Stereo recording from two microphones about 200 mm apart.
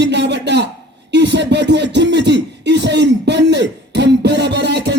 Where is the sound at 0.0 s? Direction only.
60° right (ahead or behind).